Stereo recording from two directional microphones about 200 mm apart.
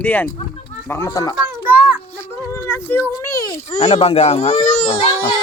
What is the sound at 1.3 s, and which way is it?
Children playing, 10° right (ahead or behind).